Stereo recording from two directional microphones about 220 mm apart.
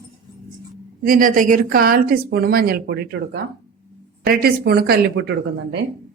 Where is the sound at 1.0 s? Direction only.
40° right (ahead or behind).